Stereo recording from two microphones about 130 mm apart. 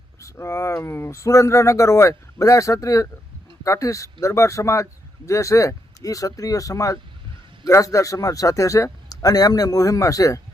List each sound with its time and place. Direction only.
0.2 s a man's voice: 25° left (ahead or behind)